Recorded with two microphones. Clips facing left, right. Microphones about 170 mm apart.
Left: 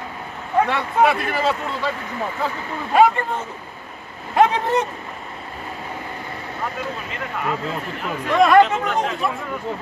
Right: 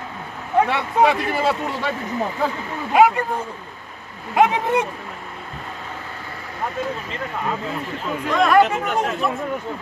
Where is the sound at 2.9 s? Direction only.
10° right (ahead or behind).